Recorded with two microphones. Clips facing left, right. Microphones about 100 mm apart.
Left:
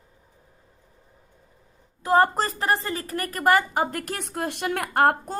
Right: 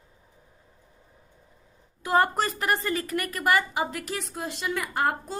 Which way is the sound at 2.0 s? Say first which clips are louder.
Left 3 dB; 35° left (ahead or behind).